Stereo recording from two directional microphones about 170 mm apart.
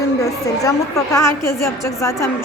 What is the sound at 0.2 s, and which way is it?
A woman's voice, 20° left (ahead or behind).